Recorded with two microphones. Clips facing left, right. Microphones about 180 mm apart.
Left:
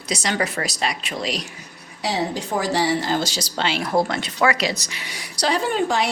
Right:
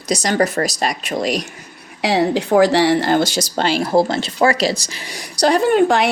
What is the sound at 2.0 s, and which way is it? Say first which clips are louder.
Speech: right 8 dB; 75° right (ahead or behind).